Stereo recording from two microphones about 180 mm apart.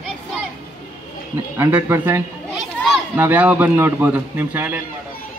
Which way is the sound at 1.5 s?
15° right (ahead or behind).